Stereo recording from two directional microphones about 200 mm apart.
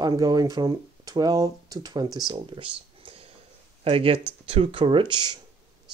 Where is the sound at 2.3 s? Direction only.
25° right (ahead or behind).